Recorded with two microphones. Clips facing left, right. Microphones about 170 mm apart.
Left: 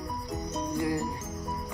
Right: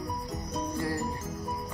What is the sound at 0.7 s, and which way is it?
Music, 15° left (ahead or behind).